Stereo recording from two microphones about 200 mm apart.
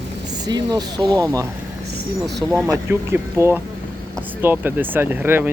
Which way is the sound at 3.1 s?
10° right (ahead or behind).